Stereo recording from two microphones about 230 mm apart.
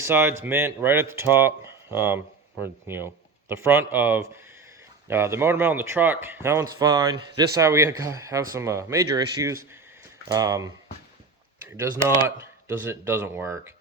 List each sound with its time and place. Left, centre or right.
0.0 s a man's voice: centre
11.8 s a man's voice: centre